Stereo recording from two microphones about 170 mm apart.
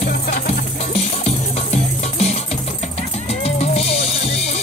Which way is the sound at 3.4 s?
35° left (ahead or behind).